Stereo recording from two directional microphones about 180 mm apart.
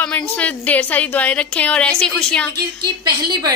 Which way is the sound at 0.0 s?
5° left (ahead or behind).